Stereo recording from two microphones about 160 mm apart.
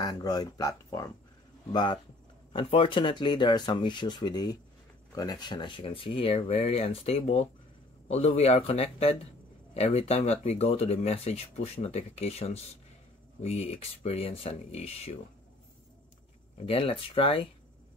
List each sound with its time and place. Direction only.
0.0 s speech: 25° left (ahead or behind); by 15.1 s 40° left (ahead or behind)
16.5 s speech: 35° left (ahead or behind)